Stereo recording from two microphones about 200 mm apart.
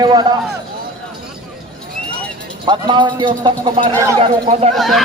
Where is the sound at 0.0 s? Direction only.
20° right (ahead or behind).